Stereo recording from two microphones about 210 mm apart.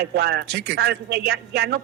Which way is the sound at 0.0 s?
50° right (ahead or behind).